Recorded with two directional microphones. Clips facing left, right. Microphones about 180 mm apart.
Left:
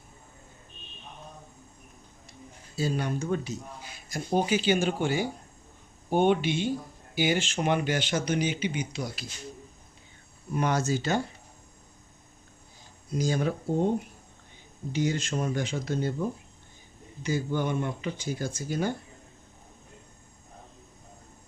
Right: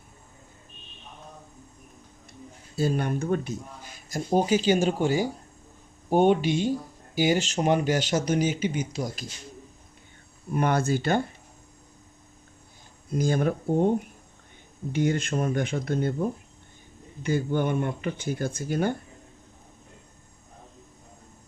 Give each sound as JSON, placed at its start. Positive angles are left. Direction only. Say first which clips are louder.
{"t": 2.7, "sound": "speech", "louder": "right 3 dB", "side_deg": -50}
{"t": 10.5, "sound": "speech", "louder": "right 3 dB", "side_deg": -55}
{"t": 13.1, "sound": "speech", "louder": "right 3 dB", "side_deg": -55}
{"t": 14.9, "sound": "speech", "louder": "right 3 dB", "side_deg": -55}
{"t": 17.2, "sound": "speech", "louder": "right 3 dB", "side_deg": -55}